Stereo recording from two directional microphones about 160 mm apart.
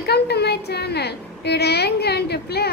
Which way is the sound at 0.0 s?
90° left.